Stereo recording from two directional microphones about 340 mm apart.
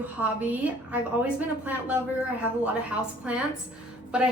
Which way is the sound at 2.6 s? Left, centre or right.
Centre.